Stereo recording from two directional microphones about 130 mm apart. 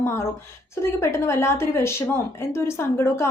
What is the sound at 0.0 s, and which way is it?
A woman's voice, 20° left (ahead or behind).